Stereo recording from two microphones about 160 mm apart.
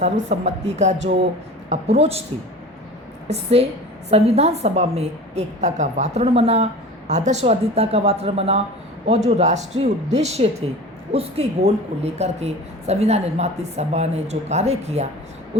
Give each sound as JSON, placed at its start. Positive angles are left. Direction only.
{"t": 0.0, "sound": "a woman's voice", "side_deg": -45}
{"t": 3.2, "sound": "a woman's voice", "side_deg": -40}